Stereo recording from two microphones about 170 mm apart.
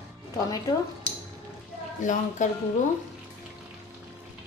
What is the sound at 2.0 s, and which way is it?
Speech, 45° left (ahead or behind).